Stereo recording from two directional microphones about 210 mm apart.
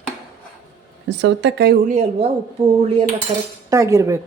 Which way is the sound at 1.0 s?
60° right (ahead or behind).